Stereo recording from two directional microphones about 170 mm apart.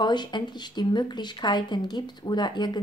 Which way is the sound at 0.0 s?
25° left (ahead or behind).